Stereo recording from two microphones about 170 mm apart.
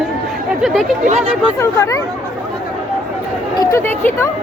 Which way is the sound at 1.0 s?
35° right (ahead or behind).